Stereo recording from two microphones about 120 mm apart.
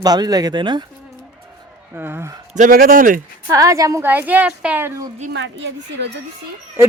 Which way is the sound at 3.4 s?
30° right (ahead or behind).